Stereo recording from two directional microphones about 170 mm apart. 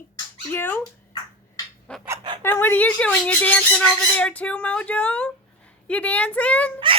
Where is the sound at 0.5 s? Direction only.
10° left (ahead or behind).